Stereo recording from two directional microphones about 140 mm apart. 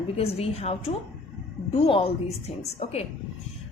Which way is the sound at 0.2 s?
45° left (ahead or behind).